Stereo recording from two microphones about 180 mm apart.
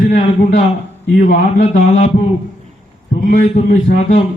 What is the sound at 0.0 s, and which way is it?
A man's voice, 50° left (ahead or behind).